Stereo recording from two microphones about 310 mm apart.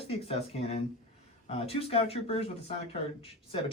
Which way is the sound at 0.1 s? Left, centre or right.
Centre.